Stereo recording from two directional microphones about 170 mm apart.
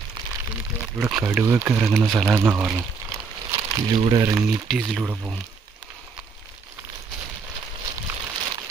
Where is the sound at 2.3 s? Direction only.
15° right (ahead or behind).